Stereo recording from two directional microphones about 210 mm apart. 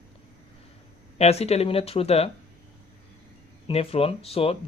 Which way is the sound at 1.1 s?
30° left (ahead or behind).